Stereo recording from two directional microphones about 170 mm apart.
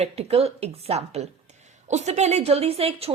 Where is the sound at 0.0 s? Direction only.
35° right (ahead or behind).